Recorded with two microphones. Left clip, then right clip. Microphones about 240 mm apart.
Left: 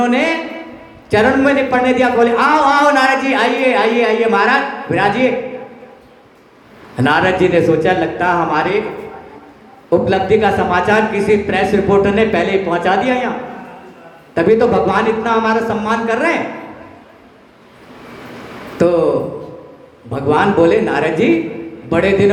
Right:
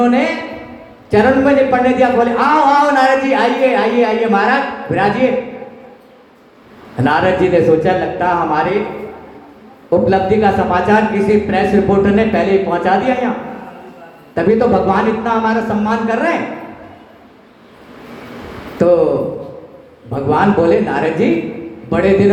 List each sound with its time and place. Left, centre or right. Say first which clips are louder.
0.0 s a man's voice: right 1 dB; left
6.9 s speech: even; left
9.9 s speech: even; left
14.3 s speech: left 1 dB; left
18.8 s speech: right 2 dB; left
20.1 s speech: even; left